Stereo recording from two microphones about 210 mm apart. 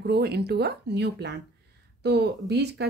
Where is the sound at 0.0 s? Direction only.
50° right (ahead or behind).